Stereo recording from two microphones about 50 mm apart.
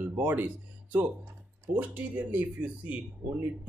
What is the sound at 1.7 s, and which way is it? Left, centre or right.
Speech, right.